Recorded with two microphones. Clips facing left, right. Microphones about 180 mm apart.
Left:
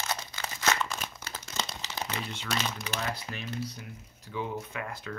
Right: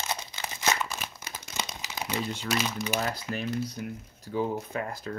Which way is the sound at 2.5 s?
10° right (ahead or behind).